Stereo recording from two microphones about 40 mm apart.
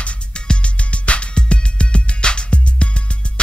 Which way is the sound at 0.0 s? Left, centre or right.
Left.